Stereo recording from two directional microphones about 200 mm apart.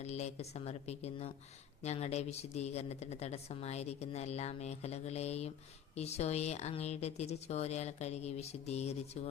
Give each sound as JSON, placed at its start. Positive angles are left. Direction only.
{"t": 0.0, "sound": "a woman's voice", "side_deg": 35}